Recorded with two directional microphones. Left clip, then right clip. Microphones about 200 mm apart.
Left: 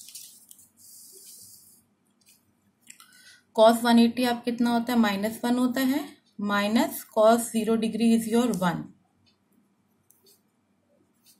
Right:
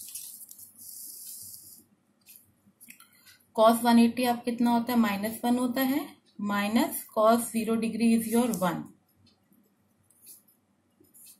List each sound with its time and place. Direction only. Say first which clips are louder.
3.5 s a woman's voice: left 3 dB; 25° left (ahead or behind)